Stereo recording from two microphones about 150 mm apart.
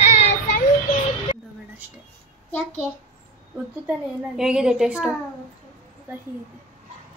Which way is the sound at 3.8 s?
5° right (ahead or behind).